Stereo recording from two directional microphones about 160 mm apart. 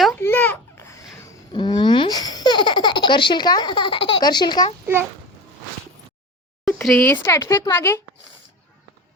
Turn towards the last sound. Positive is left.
turn(degrees=15)  # may be behind; listen again after turning